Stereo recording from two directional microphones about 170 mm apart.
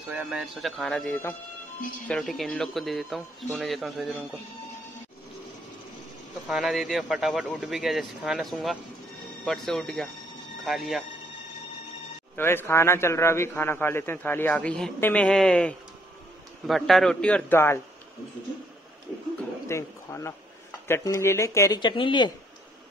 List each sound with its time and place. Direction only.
0.1 s speech: centre (ahead or behind)
6.4 s speech: centre (ahead or behind)
12.4 s a man's voice: 15° left (ahead or behind)
19.7 s a man's voice: 15° left (ahead or behind)